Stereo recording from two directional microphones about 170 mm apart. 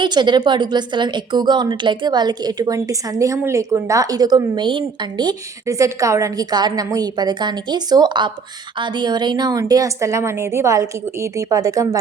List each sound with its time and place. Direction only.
0.0 s a woman's voice: 25° right (ahead or behind)